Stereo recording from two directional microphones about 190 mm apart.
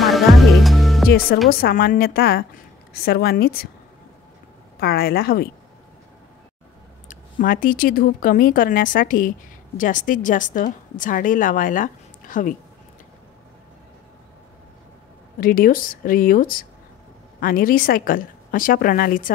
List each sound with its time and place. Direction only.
0.0 s music: centre (ahead or behind)
1.5 s a woman's voice: 50° left (ahead or behind)
4.7 s a woman's voice: 55° left (ahead or behind)
7.1 s a woman's voice: 45° left (ahead or behind)
15.4 s a woman's voice: 50° left (ahead or behind)